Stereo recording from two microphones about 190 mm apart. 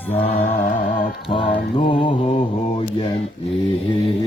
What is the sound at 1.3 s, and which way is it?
Music, 25° left (ahead or behind).